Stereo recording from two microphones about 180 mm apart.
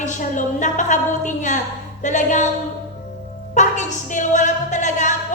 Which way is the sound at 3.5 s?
40° left (ahead or behind).